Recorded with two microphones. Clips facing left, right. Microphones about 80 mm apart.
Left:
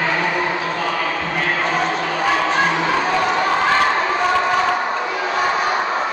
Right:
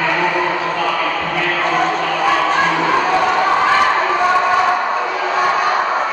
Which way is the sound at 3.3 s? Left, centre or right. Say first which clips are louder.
Right 3 dB; centre.